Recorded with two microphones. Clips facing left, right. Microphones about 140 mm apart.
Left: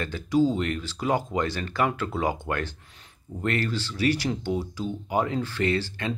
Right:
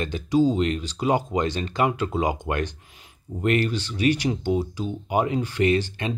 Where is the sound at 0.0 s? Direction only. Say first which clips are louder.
Right 2 dB; 20° right (ahead or behind).